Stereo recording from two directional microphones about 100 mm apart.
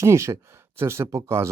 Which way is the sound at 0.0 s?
30° right (ahead or behind).